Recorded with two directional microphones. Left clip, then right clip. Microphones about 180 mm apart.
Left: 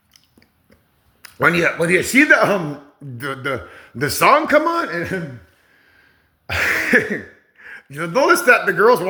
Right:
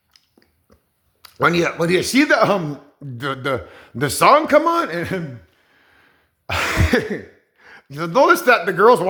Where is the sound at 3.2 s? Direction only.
25° right (ahead or behind).